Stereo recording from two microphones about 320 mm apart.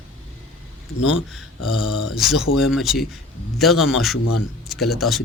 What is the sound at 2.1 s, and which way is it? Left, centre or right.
Speech, centre.